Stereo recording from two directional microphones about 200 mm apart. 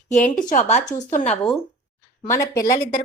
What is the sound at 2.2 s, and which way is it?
Speech, 15° left (ahead or behind).